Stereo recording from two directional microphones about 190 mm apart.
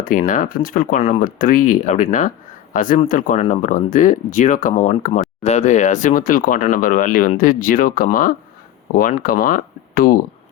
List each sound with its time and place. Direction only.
0.0 s speech: 45° left (ahead or behind)